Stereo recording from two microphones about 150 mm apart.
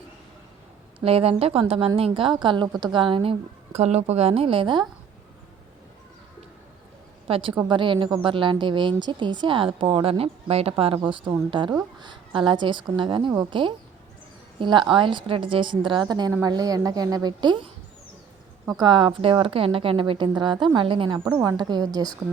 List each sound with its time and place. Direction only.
1.0 s a woman's voice: 40° right (ahead or behind)
7.3 s a woman's voice: 40° right (ahead or behind)
21.2 s speech: 15° right (ahead or behind)
21.5 s a woman's voice: 30° right (ahead or behind)